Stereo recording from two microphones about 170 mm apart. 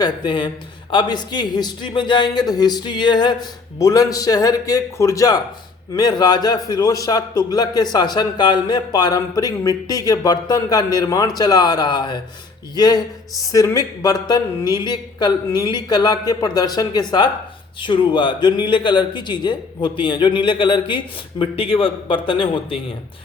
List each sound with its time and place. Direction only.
0.0 s a man's voice: 25° left (ahead or behind)